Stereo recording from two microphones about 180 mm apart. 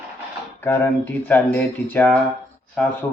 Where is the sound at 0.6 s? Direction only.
15° left (ahead or behind).